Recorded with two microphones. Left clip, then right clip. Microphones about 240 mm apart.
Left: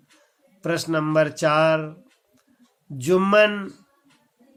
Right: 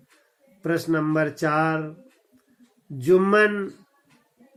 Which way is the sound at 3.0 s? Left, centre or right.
Left.